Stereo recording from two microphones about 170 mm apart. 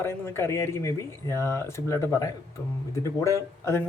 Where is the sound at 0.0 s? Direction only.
15° left (ahead or behind).